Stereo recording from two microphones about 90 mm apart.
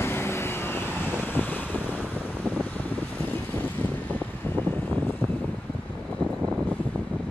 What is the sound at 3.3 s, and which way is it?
Vehicle, 20° left (ahead or behind).